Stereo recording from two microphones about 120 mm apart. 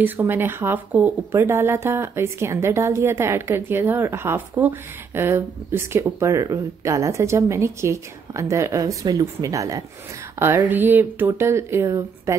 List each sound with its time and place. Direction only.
0.0 s speech: 15° right (ahead or behind)
10.4 s speech: 20° right (ahead or behind)